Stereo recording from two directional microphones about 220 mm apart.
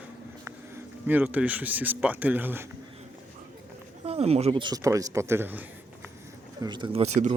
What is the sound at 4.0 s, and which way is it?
A man's voice, 30° right (ahead or behind).